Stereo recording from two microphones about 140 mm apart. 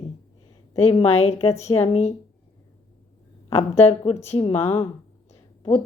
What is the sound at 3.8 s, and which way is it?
A woman's voice, 45° left (ahead or behind).